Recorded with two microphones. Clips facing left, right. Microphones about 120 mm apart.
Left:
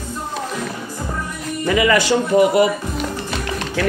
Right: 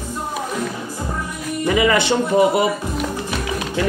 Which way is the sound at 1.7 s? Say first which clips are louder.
Left 1 dB; 20° right (ahead or behind).